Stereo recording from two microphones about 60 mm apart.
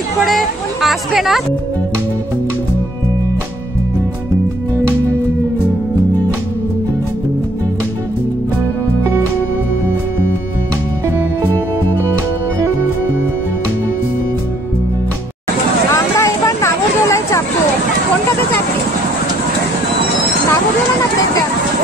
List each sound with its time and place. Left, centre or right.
0.3 s speech: centre
15.9 s vehicle: left